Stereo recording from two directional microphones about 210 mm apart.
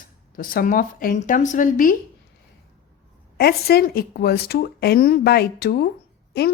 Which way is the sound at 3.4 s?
50° left (ahead or behind).